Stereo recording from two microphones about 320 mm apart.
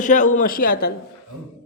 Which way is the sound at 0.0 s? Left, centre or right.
Left.